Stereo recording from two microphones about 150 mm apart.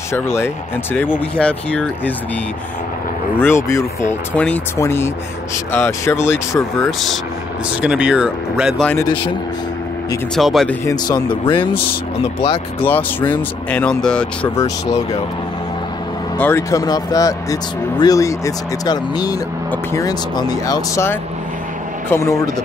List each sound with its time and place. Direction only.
0.1 s speech: 15° left (ahead or behind)
1.3 s speech: 5° left (ahead or behind)
3.3 s speech: 15° left (ahead or behind)
7.8 s speech: 5° right (ahead or behind)
10.3 s speech: centre (ahead or behind)
11.2 s speech: 30° left (ahead or behind)
12.8 s speech: 10° left (ahead or behind)
16.3 s speech: 15° left (ahead or behind)